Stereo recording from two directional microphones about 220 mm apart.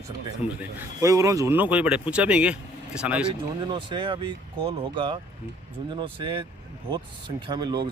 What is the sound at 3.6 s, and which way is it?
Speech, 20° right (ahead or behind).